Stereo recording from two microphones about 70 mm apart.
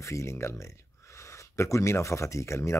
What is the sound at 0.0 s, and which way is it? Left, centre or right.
Speech, left.